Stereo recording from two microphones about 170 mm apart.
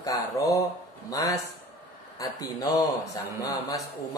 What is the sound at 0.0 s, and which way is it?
A man's voice, 20° left (ahead or behind).